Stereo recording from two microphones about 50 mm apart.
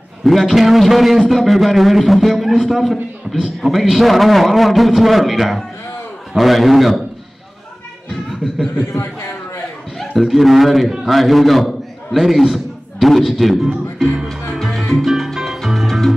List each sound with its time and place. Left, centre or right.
0.2 s a man's voice: centre
8.1 s a sound: centre
9.9 s a man's voice: centre
14.3 s music: centre
15.0 s music: centre